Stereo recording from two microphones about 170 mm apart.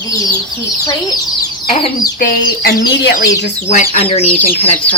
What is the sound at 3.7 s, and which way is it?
Speech, 45° left (ahead or behind).